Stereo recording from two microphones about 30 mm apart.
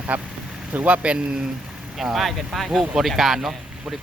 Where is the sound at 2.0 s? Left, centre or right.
Centre.